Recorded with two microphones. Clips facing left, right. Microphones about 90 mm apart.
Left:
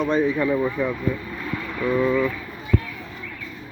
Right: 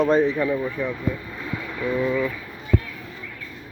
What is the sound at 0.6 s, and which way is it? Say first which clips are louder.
Vehicle: left 3 dB; 20° left (ahead or behind).